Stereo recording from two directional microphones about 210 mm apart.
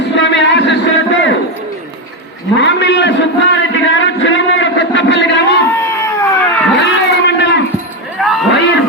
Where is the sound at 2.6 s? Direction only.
60° left (ahead or behind).